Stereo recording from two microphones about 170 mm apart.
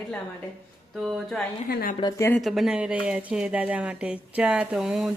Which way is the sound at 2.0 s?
20° left (ahead or behind).